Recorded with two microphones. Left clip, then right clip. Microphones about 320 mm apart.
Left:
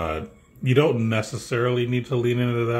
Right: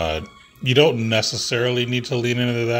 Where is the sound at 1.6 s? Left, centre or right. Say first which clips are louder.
Right 2 dB; right.